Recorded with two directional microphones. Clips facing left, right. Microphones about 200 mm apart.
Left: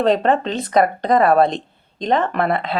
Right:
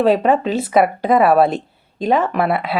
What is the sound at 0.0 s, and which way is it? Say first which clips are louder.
Speech: right 2 dB; 5° right (ahead or behind).